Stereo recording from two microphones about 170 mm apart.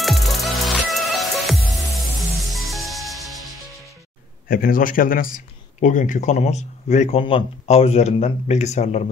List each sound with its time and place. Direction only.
0.0 s music: centre (ahead or behind)
4.5 s a man's voice: 55° left (ahead or behind)